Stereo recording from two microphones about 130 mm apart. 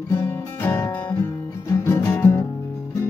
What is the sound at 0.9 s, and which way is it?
Music, 35° left (ahead or behind).